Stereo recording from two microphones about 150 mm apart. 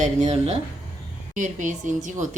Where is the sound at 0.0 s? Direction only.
50° right (ahead or behind).